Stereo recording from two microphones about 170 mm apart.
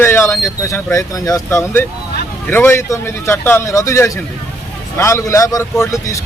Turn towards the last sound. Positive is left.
turn(degrees=20)  # may be behind; listen again after turning